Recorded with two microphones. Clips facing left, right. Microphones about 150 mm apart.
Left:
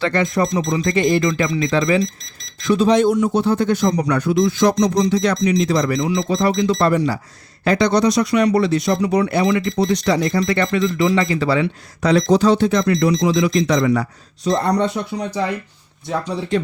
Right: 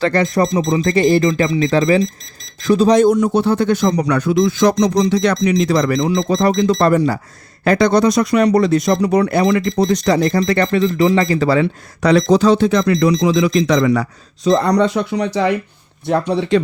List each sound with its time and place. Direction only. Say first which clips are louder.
0.0 s speech: right 3 dB; 40° right (ahead or behind)
3.3 s speech: right 2 dB; 70° right (ahead or behind); by 11.7 s 40° right (ahead or behind)
12.0 s speech: right 2 dB; 90° right
16.0 s speech: right 6 dB; 65° right (ahead or behind)